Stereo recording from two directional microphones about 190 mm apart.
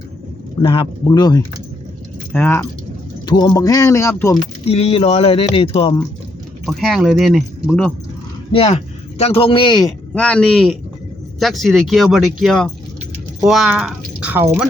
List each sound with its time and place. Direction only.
0.6 s speech: 25° left (ahead or behind); by 2.6 s 10° left (ahead or behind)
3.2 s speech: 25° left (ahead or behind)
4.6 s speech: 30° left (ahead or behind)
6.7 s speech: centre (ahead or behind)
8.5 s speech: 35° left (ahead or behind)
10.2 s speech: 5° left (ahead or behind); by 14.7 s 10° right (ahead or behind)